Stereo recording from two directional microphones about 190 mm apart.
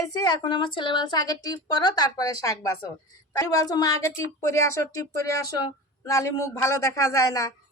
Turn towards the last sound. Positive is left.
turn(degrees=15)  # may be behind; listen again after turning